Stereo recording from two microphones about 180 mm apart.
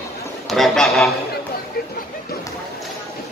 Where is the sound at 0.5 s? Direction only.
Centre (ahead or behind).